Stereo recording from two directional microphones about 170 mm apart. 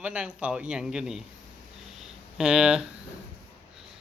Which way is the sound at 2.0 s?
5° right (ahead or behind).